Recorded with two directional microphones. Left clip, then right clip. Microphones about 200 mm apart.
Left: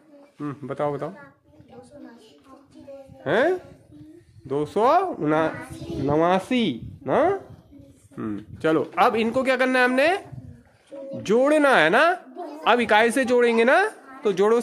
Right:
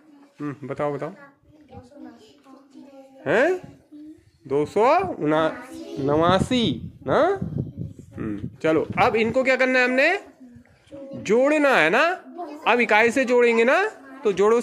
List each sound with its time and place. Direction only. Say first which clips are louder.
0.4 s speech: even; 10° left (ahead or behind)
3.3 s speech: right 1 dB; 5° left (ahead or behind)
11.2 s speech: even; 15° left (ahead or behind)